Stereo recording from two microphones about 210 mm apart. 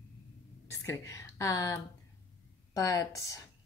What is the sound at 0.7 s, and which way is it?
A woman's voice, 15° left (ahead or behind).